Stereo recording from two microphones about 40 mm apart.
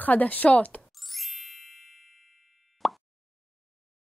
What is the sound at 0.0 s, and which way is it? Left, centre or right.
Speech, left.